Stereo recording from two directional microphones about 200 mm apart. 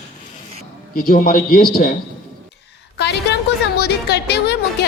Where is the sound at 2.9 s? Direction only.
55° left (ahead or behind).